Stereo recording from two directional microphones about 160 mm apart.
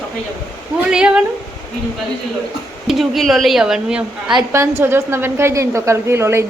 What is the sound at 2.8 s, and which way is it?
A woman's voice, centre (ahead or behind).